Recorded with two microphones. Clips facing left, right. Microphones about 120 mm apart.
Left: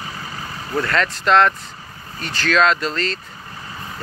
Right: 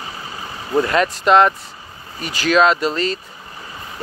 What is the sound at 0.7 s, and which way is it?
Speech, 15° right (ahead or behind).